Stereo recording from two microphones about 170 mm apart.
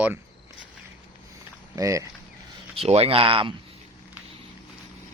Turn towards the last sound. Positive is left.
turn(degrees=-30)  # may be behind; listen again after turning